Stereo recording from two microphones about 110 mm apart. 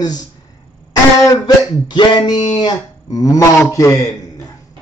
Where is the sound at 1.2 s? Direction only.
40° left (ahead or behind).